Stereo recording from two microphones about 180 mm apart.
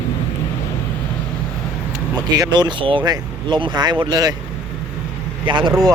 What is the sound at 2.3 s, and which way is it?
Speech, 20° right (ahead or behind).